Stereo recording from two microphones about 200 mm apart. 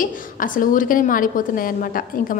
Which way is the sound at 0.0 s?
45° left (ahead or behind).